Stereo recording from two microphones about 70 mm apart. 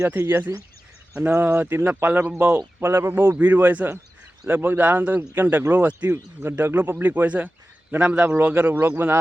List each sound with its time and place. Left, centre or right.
0.0 s speech: right
2.8 s speech: right